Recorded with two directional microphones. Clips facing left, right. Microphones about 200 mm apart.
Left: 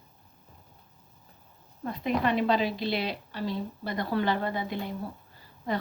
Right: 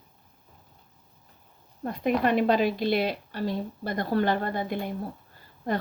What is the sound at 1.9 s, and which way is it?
A woman's voice, 50° right (ahead or behind).